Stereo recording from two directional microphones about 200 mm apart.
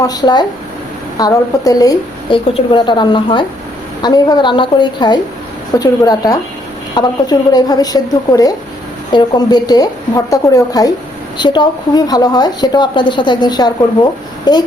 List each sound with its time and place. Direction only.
0.0 s a woman's voice: 20° left (ahead or behind)